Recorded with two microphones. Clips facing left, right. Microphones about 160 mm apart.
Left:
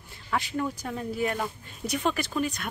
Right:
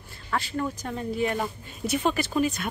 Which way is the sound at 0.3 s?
15° left (ahead or behind).